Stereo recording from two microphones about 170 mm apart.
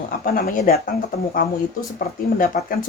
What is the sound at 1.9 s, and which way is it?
Speech, 55° left (ahead or behind).